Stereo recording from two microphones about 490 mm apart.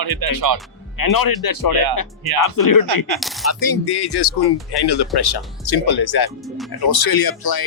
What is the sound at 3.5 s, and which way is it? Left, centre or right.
Speech, left.